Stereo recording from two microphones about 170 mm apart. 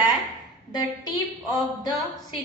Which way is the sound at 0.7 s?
25° left (ahead or behind).